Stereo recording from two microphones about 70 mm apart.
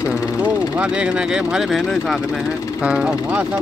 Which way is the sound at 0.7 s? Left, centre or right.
Centre.